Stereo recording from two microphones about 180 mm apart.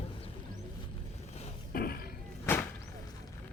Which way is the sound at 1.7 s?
55° left (ahead or behind).